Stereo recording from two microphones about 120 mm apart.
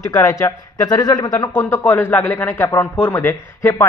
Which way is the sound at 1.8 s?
15° left (ahead or behind).